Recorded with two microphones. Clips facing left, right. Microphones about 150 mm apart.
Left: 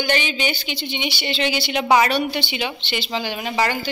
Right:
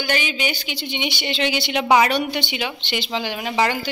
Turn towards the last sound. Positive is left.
turn(degrees=-15)  # may be behind; listen again after turning